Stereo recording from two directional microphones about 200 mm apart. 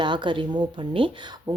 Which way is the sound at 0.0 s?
25° right (ahead or behind).